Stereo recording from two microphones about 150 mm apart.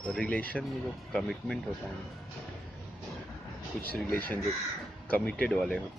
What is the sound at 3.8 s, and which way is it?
Speech, 80° right.